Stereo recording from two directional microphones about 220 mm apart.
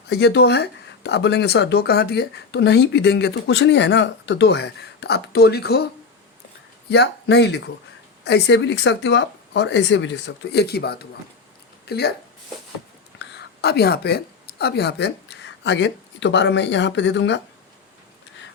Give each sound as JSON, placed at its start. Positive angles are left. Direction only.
{"t": 0.1, "sound": "speech", "side_deg": 50}
{"t": 6.9, "sound": "speech", "side_deg": 50}
{"t": 13.1, "sound": "whispering", "side_deg": 50}
{"t": 14.6, "sound": "speech", "side_deg": 50}